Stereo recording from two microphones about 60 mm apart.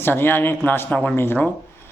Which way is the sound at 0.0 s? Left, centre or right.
Left.